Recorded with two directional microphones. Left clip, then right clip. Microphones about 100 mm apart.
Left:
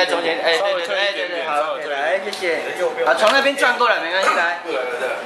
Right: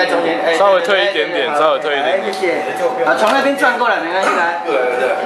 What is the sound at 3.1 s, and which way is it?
Speech, 20° left (ahead or behind).